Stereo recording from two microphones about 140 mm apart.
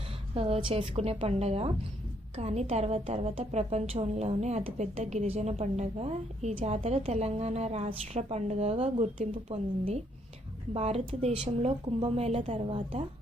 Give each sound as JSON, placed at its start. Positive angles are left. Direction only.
{"t": 0.3, "sound": "a woman's voice", "side_deg": -45}